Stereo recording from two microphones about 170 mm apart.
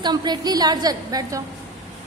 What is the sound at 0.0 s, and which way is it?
A woman's voice, 25° right (ahead or behind).